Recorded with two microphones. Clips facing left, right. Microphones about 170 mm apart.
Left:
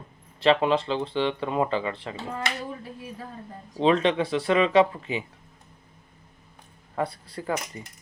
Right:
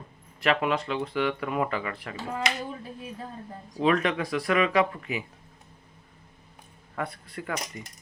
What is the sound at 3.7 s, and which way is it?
Speech, 25° left (ahead or behind).